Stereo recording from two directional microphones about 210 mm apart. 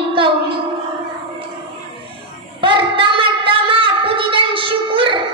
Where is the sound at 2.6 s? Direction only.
25° right (ahead or behind).